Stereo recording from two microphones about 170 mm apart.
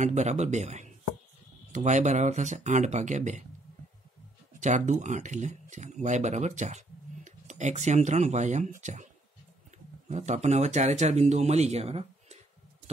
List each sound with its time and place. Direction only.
0.0 s speech: 45° right (ahead or behind)
4.6 s speech: 45° right (ahead or behind)